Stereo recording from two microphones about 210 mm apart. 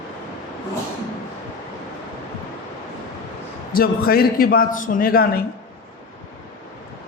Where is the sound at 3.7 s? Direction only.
45° left (ahead or behind).